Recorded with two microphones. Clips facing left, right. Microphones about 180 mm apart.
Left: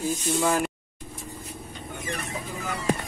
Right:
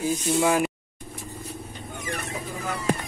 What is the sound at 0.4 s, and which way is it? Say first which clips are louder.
Speech: right 3 dB; 5° right (ahead or behind).